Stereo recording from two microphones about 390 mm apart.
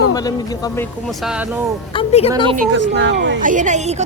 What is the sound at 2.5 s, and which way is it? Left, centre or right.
A woman's voice, right.